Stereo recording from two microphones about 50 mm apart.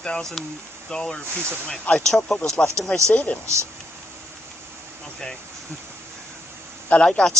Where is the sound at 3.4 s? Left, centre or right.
Right.